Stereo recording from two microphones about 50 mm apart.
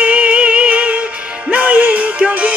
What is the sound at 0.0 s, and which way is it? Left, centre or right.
Music, right.